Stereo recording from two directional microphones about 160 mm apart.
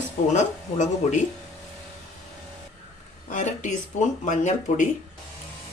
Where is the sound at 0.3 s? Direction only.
50° left (ahead or behind).